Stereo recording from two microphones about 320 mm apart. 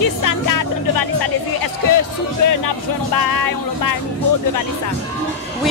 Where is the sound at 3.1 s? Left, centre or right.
Left.